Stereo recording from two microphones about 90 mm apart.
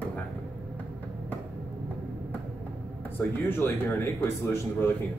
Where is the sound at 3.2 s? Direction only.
20° left (ahead or behind).